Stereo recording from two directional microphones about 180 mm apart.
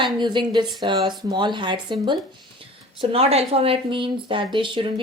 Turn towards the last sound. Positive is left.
turn(degrees=-25)  # may be behind; listen again after turning